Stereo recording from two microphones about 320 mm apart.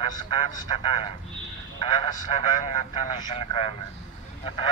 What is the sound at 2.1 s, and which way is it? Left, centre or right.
Speech, centre.